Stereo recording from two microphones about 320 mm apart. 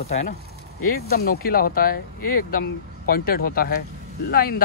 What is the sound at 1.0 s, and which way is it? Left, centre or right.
Speech, left.